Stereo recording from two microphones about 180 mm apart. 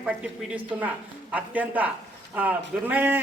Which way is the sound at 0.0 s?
5° right (ahead or behind).